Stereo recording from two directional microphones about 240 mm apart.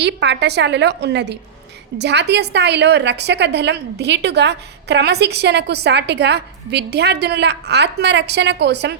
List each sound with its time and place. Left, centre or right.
0.0 s a woman's voice: right